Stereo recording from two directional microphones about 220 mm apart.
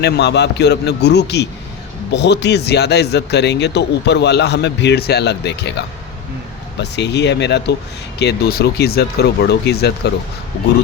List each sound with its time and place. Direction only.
0.0 s a man's voice: 50° left (ahead or behind)